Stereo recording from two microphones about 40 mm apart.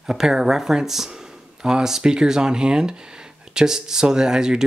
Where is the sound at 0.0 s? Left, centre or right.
Centre.